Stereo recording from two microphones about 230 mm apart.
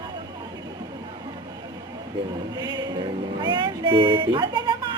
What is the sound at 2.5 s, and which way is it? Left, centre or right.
Speech, centre.